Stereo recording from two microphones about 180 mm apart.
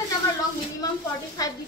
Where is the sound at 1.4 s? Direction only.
20° left (ahead or behind).